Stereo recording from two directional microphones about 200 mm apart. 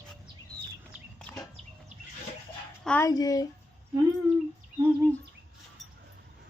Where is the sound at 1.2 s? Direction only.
15° left (ahead or behind).